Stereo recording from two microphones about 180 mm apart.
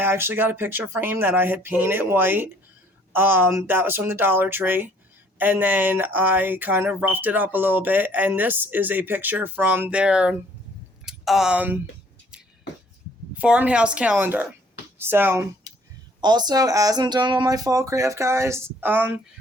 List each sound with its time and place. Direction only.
0.0 s speech: 10° right (ahead or behind)
13.3 s speech: 10° right (ahead or behind)